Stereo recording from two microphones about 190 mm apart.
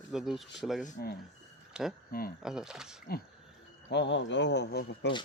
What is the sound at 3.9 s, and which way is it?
Speech, 65° left (ahead or behind).